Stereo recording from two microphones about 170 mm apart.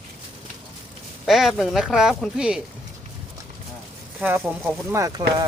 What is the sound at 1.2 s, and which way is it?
Speech, centre (ahead or behind).